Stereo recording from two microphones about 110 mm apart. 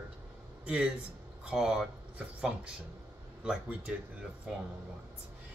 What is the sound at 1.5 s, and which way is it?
Speech, 5° right (ahead or behind).